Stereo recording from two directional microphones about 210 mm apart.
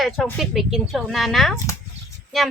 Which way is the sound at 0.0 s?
Centre (ahead or behind).